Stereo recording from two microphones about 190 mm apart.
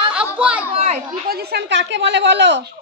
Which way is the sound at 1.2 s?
55° right (ahead or behind).